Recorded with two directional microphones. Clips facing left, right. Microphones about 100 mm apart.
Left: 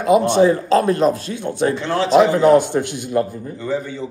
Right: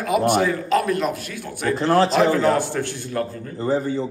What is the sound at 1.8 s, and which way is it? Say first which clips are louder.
Speech: right 3 dB; 40° right (ahead or behind).